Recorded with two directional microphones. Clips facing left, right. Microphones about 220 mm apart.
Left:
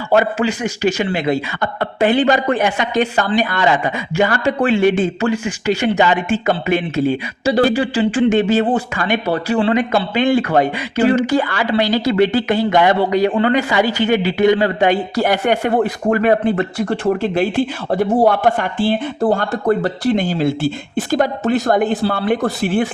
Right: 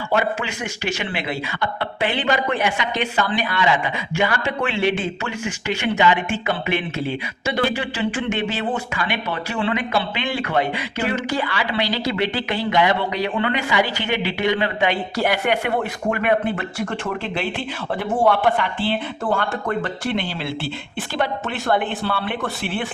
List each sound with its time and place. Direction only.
0.1 s a man's voice: 40° left (ahead or behind)